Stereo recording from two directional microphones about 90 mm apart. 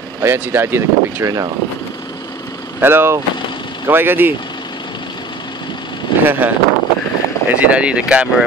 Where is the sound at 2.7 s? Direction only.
25° right (ahead or behind).